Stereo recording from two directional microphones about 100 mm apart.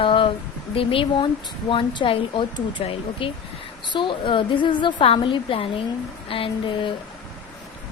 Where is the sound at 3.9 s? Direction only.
55° left (ahead or behind).